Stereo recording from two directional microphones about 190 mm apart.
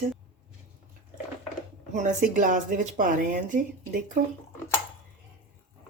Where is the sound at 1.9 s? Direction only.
40° right (ahead or behind).